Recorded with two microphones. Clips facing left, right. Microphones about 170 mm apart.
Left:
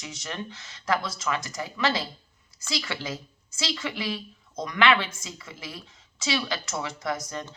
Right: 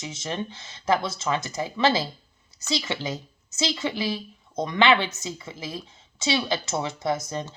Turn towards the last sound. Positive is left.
turn(degrees=-25)  # may be behind; listen again after turning